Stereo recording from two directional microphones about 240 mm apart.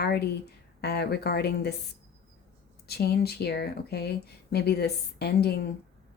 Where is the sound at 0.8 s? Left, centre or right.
Left.